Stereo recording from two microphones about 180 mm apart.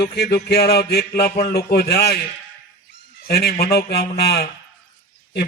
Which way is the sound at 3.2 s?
60° left (ahead or behind).